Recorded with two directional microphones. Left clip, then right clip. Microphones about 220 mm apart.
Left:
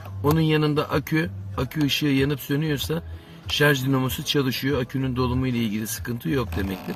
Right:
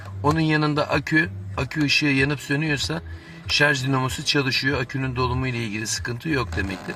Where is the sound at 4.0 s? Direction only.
25° right (ahead or behind).